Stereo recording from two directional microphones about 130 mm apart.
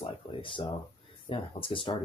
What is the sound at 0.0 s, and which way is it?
Speech, 40° left (ahead or behind).